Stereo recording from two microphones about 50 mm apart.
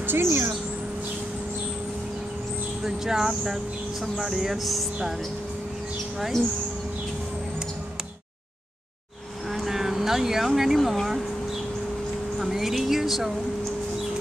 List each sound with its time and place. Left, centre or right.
0.0 s speech: right
2.8 s speech: centre
9.5 s vehicle: centre
12.4 s a sound: centre